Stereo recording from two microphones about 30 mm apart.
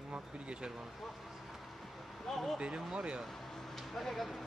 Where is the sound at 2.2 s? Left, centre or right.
Centre.